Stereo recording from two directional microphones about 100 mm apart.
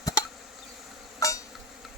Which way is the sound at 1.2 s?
35° left (ahead or behind).